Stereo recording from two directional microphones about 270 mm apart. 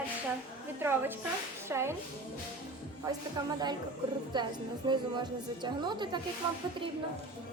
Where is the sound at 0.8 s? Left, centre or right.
Centre.